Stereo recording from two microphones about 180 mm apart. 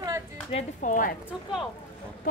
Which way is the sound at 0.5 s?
40° left (ahead or behind).